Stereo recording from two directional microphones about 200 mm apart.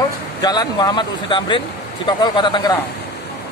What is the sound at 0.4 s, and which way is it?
Speech, 20° left (ahead or behind).